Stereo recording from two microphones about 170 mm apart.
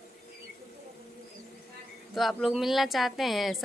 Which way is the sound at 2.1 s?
Centre (ahead or behind).